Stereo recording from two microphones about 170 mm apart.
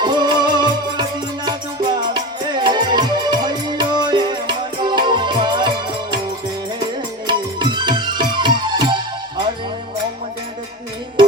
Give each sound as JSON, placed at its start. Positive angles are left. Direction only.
{"t": 0.0, "sound": "music", "side_deg": -25}